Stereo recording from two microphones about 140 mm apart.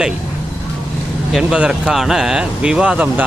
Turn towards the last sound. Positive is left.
turn(degrees=-10)  # may be behind; listen again after turning